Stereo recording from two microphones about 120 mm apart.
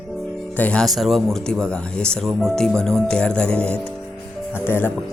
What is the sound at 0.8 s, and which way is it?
A man's voice, centre (ahead or behind).